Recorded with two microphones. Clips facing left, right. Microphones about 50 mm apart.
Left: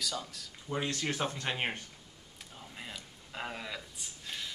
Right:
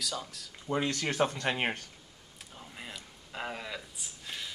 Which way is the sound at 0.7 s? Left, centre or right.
Right.